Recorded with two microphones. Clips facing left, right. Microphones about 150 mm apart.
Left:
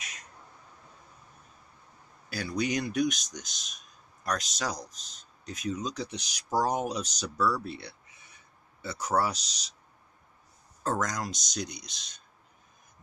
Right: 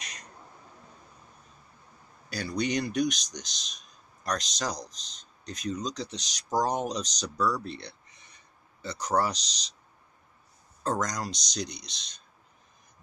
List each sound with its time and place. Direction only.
0.0 s bird: 5° left (ahead or behind)
2.2 s speech: 5° left (ahead or behind)
10.8 s speech: 5° left (ahead or behind)
11.8 s speech: 50° left (ahead or behind)